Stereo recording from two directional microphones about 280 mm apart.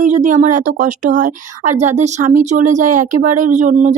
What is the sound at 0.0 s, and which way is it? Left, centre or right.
Speech, right.